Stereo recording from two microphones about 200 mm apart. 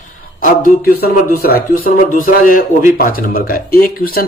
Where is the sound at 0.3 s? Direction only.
45° left (ahead or behind).